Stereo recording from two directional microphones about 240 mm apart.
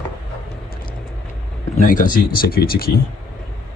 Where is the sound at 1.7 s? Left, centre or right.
Left.